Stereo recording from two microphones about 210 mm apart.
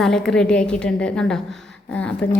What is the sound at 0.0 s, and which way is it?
A woman's voice, centre (ahead or behind).